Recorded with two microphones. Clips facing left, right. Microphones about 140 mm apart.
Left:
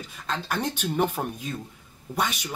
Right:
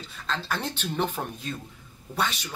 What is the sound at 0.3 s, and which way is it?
A man's voice, 10° left (ahead or behind).